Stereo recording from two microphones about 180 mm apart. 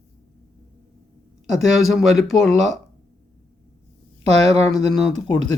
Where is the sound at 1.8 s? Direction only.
Centre (ahead or behind).